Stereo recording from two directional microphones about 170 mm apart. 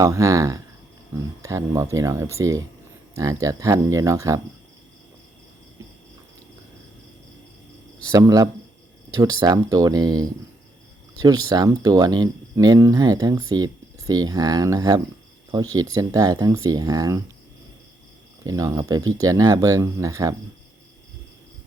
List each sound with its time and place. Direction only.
0.0 s speech: 20° right (ahead or behind)
8.1 s speech: 20° right (ahead or behind)
18.4 s speech: 20° right (ahead or behind)